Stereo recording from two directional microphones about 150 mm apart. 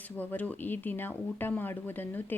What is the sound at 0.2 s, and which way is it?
Speech, 10° left (ahead or behind).